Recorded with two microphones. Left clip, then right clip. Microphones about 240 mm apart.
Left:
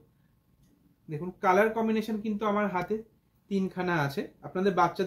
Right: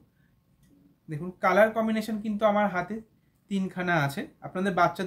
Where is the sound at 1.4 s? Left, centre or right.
Right.